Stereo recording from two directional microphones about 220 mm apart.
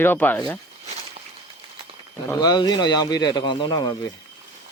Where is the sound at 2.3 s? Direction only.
20° left (ahead or behind).